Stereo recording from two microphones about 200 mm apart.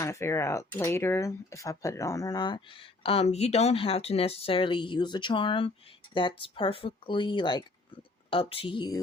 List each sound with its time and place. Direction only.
0.0 s speech: 15° left (ahead or behind)